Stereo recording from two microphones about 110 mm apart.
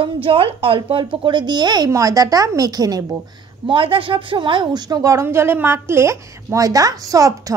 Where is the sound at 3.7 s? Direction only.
55° right (ahead or behind).